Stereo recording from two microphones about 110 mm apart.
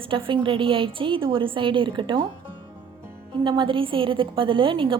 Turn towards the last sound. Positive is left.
turn(degrees=-50)  # may be behind; listen again after turning